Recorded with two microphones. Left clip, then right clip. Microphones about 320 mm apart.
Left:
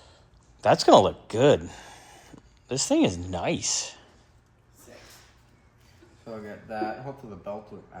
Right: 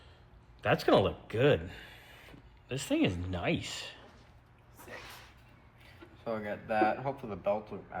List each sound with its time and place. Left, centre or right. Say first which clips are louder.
0.6 s speech: left 9 dB; centre
6.2 s speech: right 3 dB; centre